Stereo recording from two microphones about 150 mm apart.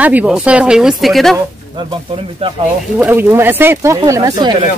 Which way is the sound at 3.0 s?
15° right (ahead or behind).